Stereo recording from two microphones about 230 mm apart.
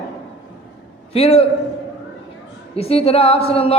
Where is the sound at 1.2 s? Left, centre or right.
Left.